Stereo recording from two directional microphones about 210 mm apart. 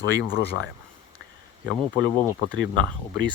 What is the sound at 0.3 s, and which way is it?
Speech, 50° left (ahead or behind).